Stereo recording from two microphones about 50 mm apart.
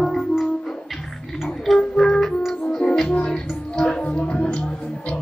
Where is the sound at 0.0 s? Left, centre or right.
Centre.